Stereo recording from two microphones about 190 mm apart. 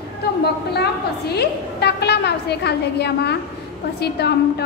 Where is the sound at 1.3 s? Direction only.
60° left (ahead or behind).